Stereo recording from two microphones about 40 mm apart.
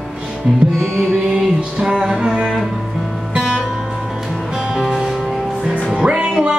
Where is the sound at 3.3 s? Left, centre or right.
Right.